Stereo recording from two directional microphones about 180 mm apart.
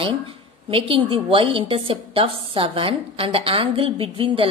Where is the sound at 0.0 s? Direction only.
30° right (ahead or behind).